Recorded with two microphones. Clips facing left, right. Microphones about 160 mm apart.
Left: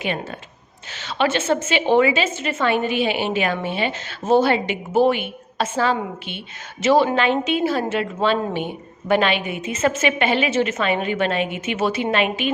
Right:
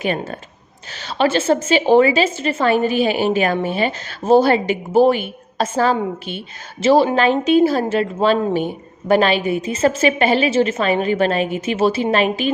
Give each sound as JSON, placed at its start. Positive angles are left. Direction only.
{"t": 0.0, "sound": "a woman's voice", "side_deg": -40}